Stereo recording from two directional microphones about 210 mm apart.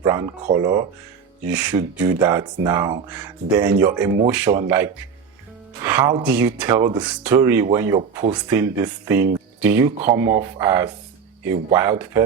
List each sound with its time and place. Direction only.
0.0 s speech: 15° right (ahead or behind)
1.5 s speech: 5° right (ahead or behind)